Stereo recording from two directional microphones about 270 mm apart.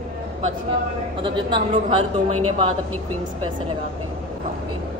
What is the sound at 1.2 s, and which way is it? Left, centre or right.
Speech, centre.